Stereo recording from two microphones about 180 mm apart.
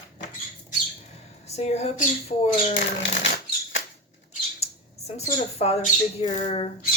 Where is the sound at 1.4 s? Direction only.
35° left (ahead or behind).